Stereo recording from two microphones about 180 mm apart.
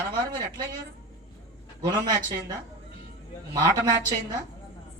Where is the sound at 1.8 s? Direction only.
25° right (ahead or behind).